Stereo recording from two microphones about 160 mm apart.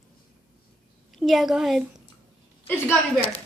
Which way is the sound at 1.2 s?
Centre (ahead or behind).